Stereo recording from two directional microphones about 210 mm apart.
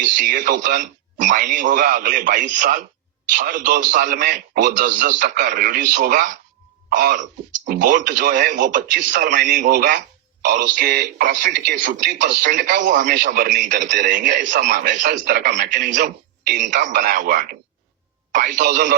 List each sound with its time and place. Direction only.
0.0 s a man's voice: 40° right (ahead or behind)